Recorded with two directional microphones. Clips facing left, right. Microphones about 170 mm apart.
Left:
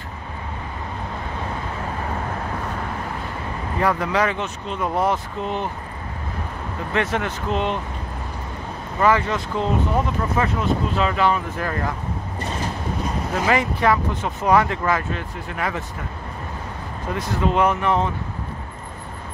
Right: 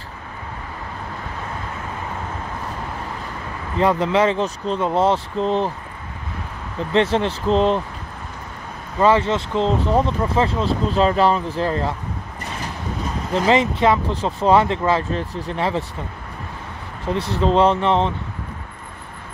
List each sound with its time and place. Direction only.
3.8 s speech: 25° right (ahead or behind)
6.9 s speech: 30° right (ahead or behind)
9.0 s speech: 25° right (ahead or behind)
13.5 s speech: 20° right (ahead or behind)
17.1 s speech: 30° right (ahead or behind)